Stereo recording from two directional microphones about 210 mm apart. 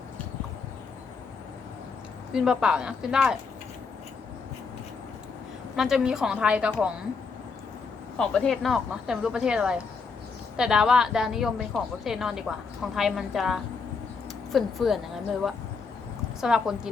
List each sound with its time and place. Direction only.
2.3 s speech: 5° right (ahead or behind)
5.7 s speech: centre (ahead or behind)
8.2 s speech: 5° left (ahead or behind)
16.4 s speech: centre (ahead or behind)